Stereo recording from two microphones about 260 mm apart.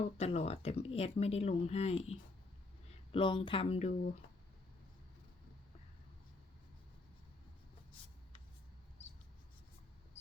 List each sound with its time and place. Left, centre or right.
0.2 s speech: left
3.1 s speech: centre